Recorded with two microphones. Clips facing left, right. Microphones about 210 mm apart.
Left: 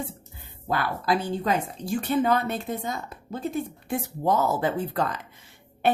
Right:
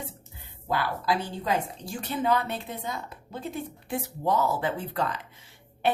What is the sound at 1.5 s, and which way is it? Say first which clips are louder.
A woman's voice: even; 50° left (ahead or behind).